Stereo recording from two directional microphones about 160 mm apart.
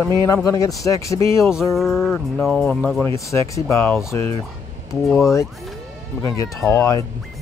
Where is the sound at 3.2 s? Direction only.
20° left (ahead or behind).